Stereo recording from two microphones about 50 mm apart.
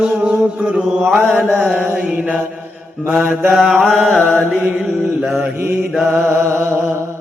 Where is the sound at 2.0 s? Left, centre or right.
Right.